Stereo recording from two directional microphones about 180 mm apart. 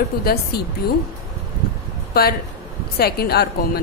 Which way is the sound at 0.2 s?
60° left (ahead or behind).